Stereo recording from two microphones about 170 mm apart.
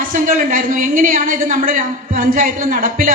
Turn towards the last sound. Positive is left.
turn(degrees=-55)  # may be behind; listen again after turning